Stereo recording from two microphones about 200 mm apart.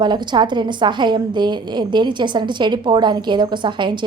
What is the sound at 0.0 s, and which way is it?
A woman's voice, 20° right (ahead or behind).